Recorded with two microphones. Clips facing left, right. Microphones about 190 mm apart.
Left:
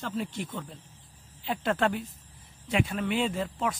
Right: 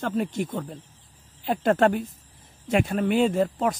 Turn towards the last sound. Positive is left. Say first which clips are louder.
# right 7 dB
turn(degrees=-45)  # may be behind; listen again after turning